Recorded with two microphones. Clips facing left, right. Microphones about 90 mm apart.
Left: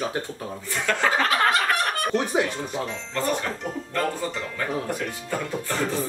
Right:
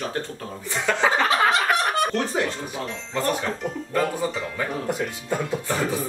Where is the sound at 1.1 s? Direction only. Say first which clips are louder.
Right 1 dB; 5° right (ahead or behind).